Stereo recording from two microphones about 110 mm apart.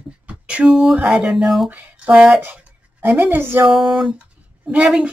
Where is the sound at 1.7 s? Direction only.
15° right (ahead or behind).